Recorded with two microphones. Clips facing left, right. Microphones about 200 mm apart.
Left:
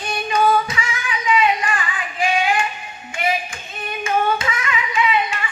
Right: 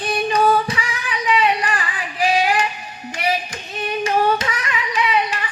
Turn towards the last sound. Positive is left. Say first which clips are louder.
# even
turn(degrees=-35)  # may be behind; listen again after turning